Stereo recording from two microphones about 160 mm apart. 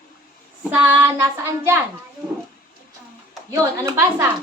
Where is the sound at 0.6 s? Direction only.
10° right (ahead or behind).